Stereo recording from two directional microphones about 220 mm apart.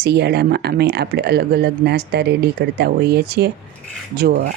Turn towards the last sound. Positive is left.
turn(degrees=-45)  # may be behind; listen again after turning